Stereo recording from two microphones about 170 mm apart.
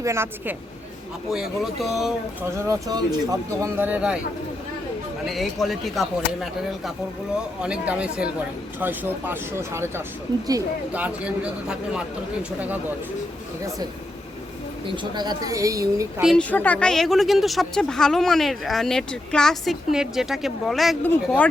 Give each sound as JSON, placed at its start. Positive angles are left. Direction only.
{"t": 0.0, "sound": "speech", "side_deg": -15}
{"t": 1.3, "sound": "a woman's voice", "side_deg": 0}
{"t": 2.6, "sound": "speech", "side_deg": -20}
{"t": 5.2, "sound": "a woman's voice", "side_deg": 0}
{"t": 14.8, "sound": "a woman's voice", "side_deg": -25}
{"t": 16.2, "sound": "a woman's voice", "side_deg": 5}